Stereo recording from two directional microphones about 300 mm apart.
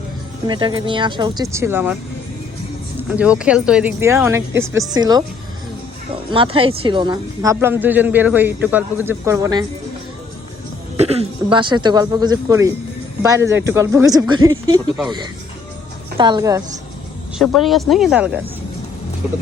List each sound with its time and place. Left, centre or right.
0.4 s speech: centre
3.0 s speech: centre
6.3 s speech: centre
10.9 s speech: right
16.1 s speech: centre
17.3 s speech: centre